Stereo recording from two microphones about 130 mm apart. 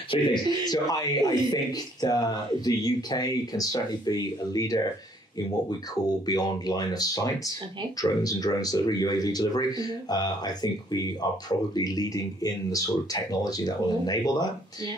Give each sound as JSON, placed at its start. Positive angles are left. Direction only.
{"t": 0.1, "sound": "a man's voice", "side_deg": 35}
{"t": 6.2, "sound": "a man's voice", "side_deg": 30}